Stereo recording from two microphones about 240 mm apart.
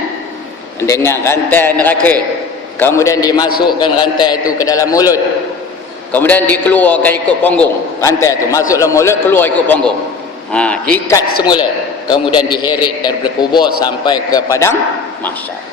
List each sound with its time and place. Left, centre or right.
0.8 s a man's voice: centre
12.0 s a man's voice: centre